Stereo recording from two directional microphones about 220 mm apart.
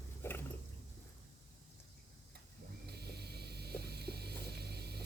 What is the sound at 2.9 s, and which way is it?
Vehicle, 45° right (ahead or behind).